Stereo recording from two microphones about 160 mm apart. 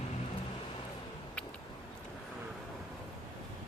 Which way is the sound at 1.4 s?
5° left (ahead or behind).